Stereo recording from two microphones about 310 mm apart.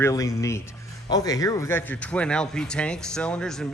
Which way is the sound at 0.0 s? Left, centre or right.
Centre.